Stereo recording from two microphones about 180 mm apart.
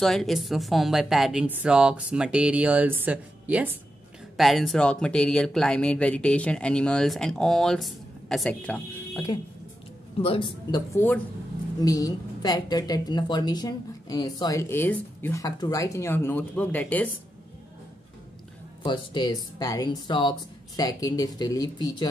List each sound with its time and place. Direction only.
0.0 s speech: centre (ahead or behind)
10.2 s a woman's voice: 30° left (ahead or behind)
11.8 s a woman's voice: 20° left (ahead or behind)
18.8 s a woman's voice: 25° left (ahead or behind)